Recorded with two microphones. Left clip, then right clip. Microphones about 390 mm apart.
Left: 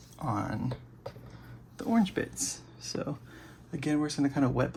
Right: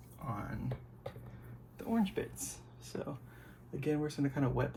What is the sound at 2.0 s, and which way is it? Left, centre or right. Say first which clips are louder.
Speech: left 6 dB; left.